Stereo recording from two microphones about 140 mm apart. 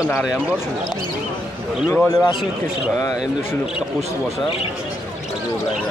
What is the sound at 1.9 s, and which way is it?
Speech, 15° left (ahead or behind).